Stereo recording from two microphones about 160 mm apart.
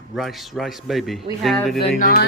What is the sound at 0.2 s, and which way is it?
Speech, centre (ahead or behind).